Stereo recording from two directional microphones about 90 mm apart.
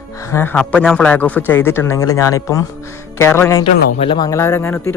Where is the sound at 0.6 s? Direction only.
15° left (ahead or behind).